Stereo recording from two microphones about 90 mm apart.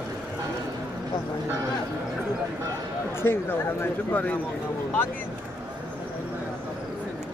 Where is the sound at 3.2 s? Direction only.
25° left (ahead or behind).